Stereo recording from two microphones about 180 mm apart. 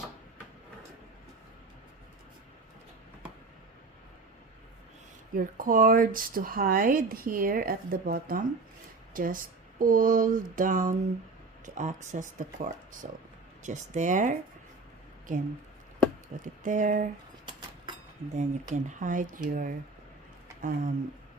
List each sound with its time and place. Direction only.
5.3 s speech: 50° right (ahead or behind)
16.4 s speech: 45° right (ahead or behind)
18.3 s speech: 45° right (ahead or behind)